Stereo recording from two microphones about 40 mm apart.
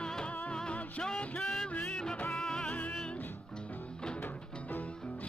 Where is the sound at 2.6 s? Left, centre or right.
Left.